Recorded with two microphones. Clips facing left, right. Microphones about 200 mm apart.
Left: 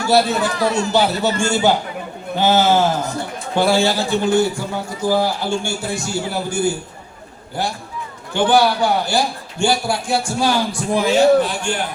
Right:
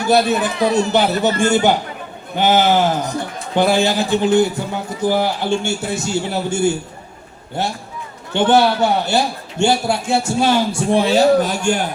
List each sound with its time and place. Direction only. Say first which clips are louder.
0.0 s a man's voice: right 1 dB; 20° right (ahead or behind)
2.4 s a man's voice: right 1 dB; 15° right (ahead or behind); by 11.8 s 40° right (ahead or behind)